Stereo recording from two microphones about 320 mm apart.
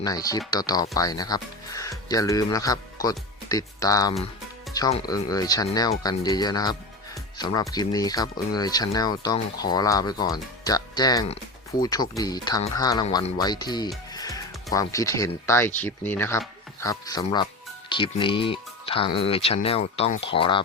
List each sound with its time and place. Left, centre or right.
0.0 s speech: centre